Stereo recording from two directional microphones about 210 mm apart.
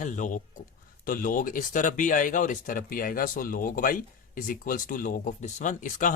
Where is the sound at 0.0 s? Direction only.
35° left (ahead or behind).